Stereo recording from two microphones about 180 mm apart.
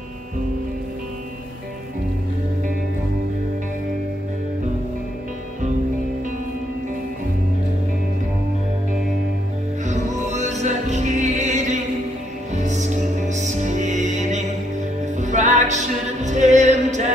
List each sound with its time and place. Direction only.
9.8 s music: 40° right (ahead or behind)